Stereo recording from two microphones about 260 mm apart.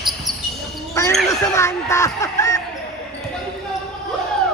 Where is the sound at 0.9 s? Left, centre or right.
Centre.